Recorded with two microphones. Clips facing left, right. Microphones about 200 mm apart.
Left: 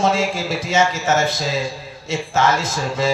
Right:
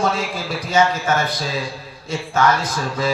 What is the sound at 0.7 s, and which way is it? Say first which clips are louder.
Speech: right 1 dB; 25° left (ahead or behind).